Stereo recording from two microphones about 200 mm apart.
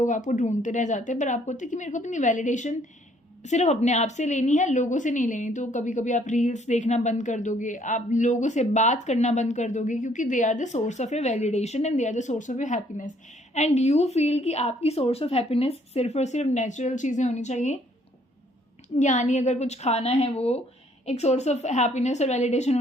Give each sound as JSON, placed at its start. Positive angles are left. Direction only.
{"t": 0.0, "sound": "a woman's voice", "side_deg": 40}
{"t": 18.9, "sound": "a woman's voice", "side_deg": 35}